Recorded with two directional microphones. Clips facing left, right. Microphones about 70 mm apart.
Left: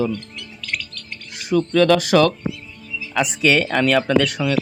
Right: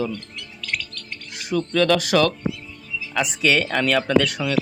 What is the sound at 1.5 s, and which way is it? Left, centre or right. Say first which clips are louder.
Speech: left 4 dB; left.